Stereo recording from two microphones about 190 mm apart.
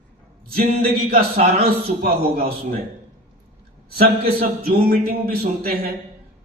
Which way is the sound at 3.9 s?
55° right (ahead or behind).